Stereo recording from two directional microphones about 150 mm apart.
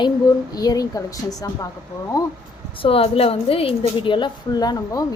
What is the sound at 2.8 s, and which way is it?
A woman's voice, 40° left (ahead or behind).